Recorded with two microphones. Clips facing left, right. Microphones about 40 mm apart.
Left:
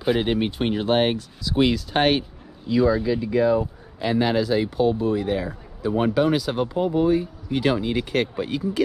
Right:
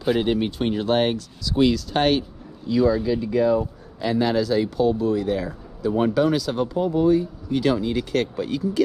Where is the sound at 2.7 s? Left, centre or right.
Centre.